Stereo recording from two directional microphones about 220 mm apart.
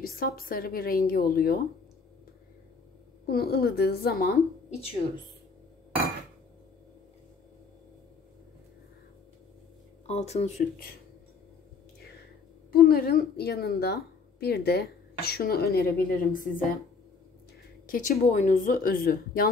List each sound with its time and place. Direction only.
0.0 s a woman's voice: 40° left (ahead or behind)
3.3 s a woman's voice: 45° left (ahead or behind)
10.0 s speech: 30° left (ahead or behind)
12.7 s a woman's voice: 40° left (ahead or behind)
17.8 s speech: 40° left (ahead or behind)